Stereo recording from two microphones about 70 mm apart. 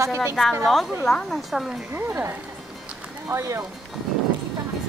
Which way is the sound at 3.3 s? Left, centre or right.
Right.